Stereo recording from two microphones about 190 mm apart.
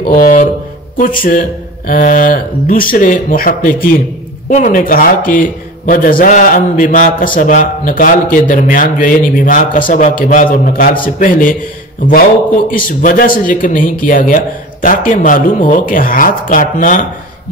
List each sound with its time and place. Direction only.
0.1 s a man's voice: 45° left (ahead or behind)
12.7 s a man's voice: 45° left (ahead or behind)